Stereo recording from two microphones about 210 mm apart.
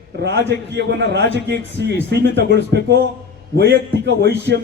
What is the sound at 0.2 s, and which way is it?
A man's voice, 55° right (ahead or behind).